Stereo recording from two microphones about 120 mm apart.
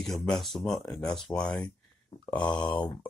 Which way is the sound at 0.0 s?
5° left (ahead or behind).